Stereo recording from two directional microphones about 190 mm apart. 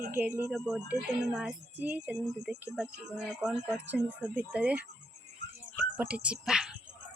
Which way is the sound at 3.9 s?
10° right (ahead or behind).